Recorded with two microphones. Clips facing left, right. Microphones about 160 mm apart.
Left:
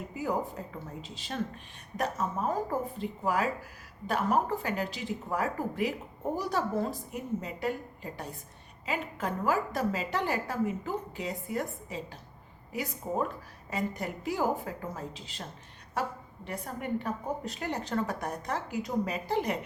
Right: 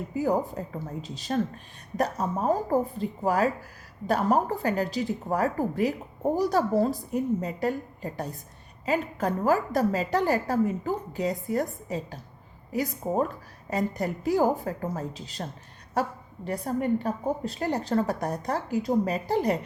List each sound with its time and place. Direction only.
0.2 s a woman's voice: 40° right (ahead or behind)